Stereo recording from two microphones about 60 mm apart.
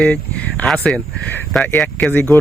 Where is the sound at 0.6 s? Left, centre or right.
Centre.